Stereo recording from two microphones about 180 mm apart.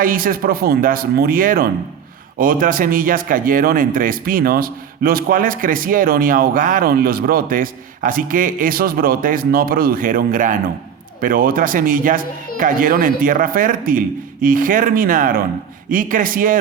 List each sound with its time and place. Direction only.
0.0 s speech: 50° right (ahead or behind)